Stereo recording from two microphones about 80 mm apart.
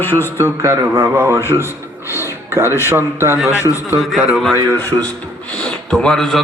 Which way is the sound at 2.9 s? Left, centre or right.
Right.